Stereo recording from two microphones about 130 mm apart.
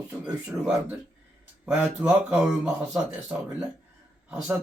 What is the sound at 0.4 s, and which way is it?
A man's voice, 5° right (ahead or behind).